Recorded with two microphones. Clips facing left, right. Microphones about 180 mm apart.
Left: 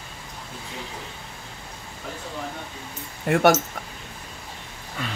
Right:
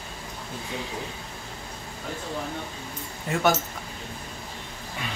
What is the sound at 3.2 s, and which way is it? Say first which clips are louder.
Speech: left 5 dB; 60° left (ahead or behind).